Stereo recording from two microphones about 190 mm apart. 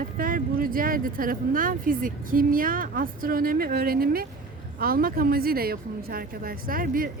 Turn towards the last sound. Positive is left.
turn(degrees=-50)  # may be behind; listen again after turning